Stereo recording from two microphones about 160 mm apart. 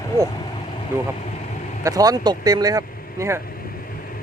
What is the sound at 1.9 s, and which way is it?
Speech, 20° right (ahead or behind).